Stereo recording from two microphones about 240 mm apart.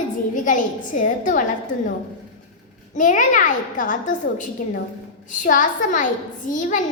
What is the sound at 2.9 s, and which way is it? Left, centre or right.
A child's voice, left.